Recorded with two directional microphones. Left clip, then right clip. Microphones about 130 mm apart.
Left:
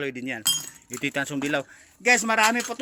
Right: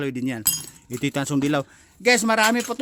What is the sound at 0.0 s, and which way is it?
A man's voice, 55° right (ahead or behind).